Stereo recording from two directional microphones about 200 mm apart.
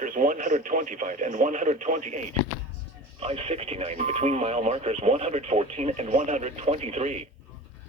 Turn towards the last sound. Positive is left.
turn(degrees=-35)  # may be behind; listen again after turning